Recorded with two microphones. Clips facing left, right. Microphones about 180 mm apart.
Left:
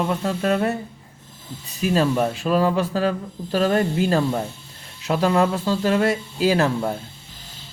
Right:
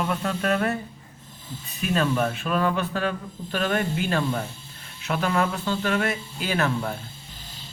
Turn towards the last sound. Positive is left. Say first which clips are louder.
# left 6 dB
turn(degrees=30)  # may be behind; listen again after turning